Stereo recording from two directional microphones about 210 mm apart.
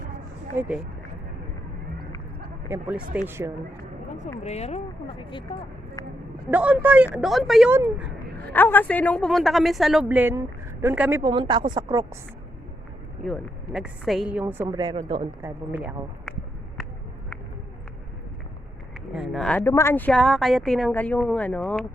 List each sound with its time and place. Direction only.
0.5 s speech: 10° right (ahead or behind)
2.6 s speech: 10° right (ahead or behind)
4.4 s speech: 30° left (ahead or behind)
6.5 s speech: 5° right (ahead or behind)
8.5 s speech: 10° left (ahead or behind); by 11.2 s 10° right (ahead or behind)
11.2 s speech: 20° right (ahead or behind)
13.2 s speech: centre (ahead or behind)
14.7 s speech: 20° right (ahead or behind)
15.4 s speech: 10° right (ahead or behind)
19.1 s speech: centre (ahead or behind)